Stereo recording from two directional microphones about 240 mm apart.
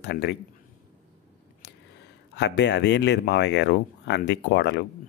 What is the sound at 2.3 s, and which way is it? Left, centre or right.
A man's voice, left.